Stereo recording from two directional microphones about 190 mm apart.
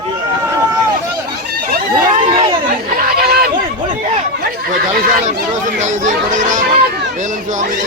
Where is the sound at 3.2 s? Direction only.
55° right (ahead or behind).